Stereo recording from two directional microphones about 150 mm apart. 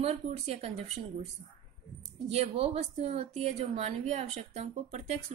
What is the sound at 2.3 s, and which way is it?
Speech, 45° right (ahead or behind).